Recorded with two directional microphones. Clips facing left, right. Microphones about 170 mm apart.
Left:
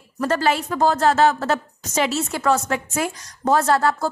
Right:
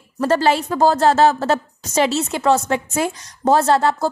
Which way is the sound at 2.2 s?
20° right (ahead or behind).